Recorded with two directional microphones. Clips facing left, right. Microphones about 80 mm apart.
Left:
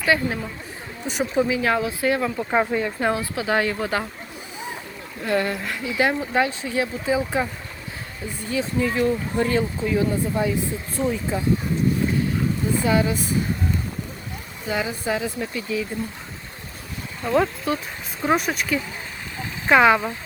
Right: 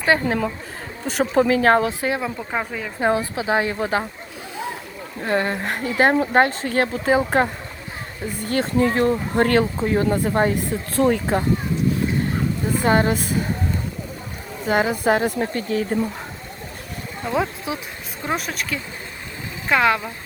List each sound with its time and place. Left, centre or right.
0.0 s speech: right
1.9 s speech: right
2.4 s speech: centre
3.0 s speech: right
5.2 s speech: right
5.6 s speech: right
9.7 s speech: right
10.2 s speech: right
12.8 s speech: right
14.7 s speech: right
17.2 s speech: centre